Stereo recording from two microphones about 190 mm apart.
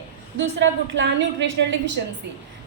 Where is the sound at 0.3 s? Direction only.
75° right (ahead or behind).